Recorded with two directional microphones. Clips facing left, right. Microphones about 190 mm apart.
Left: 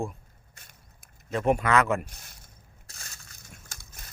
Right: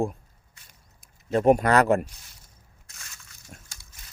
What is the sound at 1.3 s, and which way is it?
Speech, 40° right (ahead or behind).